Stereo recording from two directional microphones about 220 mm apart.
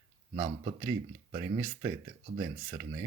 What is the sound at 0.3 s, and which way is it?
Speech, 25° right (ahead or behind).